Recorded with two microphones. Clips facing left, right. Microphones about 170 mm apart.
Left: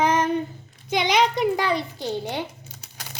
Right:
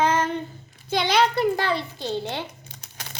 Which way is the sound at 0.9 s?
15° left (ahead or behind).